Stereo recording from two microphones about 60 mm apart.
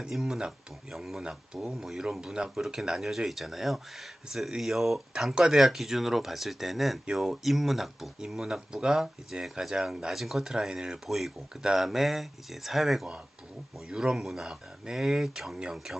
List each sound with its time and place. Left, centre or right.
0.0 s speech: centre